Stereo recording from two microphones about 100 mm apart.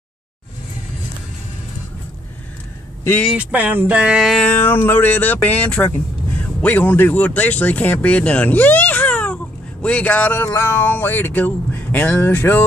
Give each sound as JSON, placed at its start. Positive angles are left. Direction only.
{"t": 3.3, "sound": "speech", "side_deg": -15}
{"t": 4.5, "sound": "speech", "side_deg": 20}